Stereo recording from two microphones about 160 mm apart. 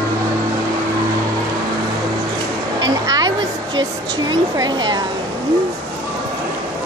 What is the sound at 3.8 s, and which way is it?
Speech, 25° right (ahead or behind).